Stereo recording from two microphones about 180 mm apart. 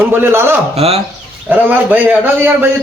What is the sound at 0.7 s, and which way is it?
Speech, 35° right (ahead or behind).